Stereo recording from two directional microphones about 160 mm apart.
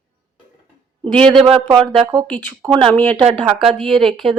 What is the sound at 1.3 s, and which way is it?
Speech, 35° right (ahead or behind).